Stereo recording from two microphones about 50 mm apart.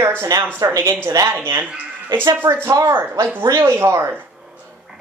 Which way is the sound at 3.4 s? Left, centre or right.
Right.